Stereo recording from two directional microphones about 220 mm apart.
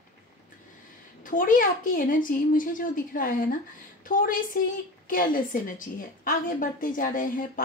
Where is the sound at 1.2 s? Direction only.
40° left (ahead or behind).